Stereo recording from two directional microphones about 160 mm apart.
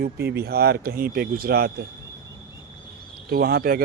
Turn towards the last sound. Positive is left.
turn(degrees=-70)  # may be behind; listen again after turning